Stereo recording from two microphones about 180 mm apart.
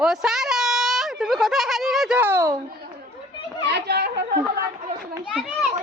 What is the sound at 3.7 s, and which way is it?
Chatter, 65° right (ahead or behind).